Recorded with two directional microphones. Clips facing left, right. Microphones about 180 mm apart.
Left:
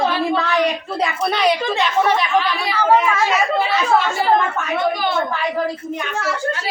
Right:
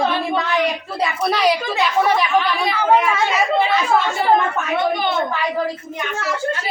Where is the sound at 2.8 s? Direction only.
15° right (ahead or behind).